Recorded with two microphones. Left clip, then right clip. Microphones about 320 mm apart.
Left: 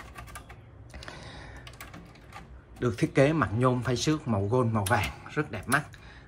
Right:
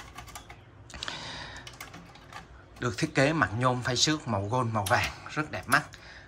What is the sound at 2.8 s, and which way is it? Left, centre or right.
Speech, centre.